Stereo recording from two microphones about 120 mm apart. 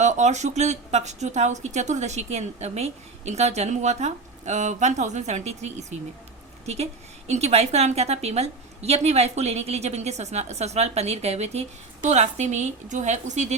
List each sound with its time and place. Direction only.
0.0 s a woman's voice: 75° right (ahead or behind)
12.0 s a woman's voice: 75° right (ahead or behind)